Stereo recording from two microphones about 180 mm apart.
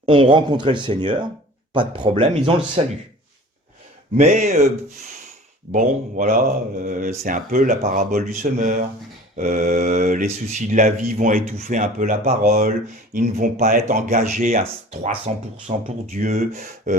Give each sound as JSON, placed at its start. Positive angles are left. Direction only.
{"t": 0.0, "sound": "speech", "side_deg": -25}
{"t": 4.2, "sound": "speech", "side_deg": -40}
{"t": 5.7, "sound": "speech", "side_deg": -50}